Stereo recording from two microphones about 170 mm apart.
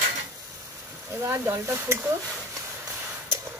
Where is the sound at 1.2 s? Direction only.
15° right (ahead or behind).